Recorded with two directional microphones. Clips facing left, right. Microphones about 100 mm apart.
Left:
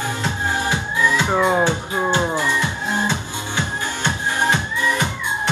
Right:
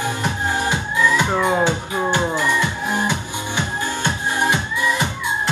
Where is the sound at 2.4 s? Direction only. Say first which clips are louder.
Right 2 dB; 15° right (ahead or behind).